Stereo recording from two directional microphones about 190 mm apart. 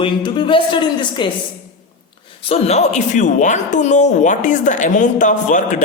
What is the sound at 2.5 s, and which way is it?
Speech, 35° left (ahead or behind).